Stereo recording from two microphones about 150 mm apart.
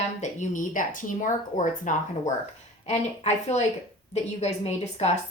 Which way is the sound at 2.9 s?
45° left (ahead or behind).